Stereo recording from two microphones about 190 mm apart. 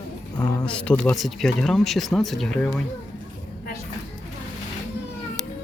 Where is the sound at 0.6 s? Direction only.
5° left (ahead or behind).